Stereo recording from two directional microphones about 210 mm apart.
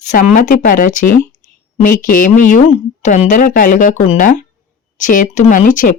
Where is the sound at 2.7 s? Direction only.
35° left (ahead or behind).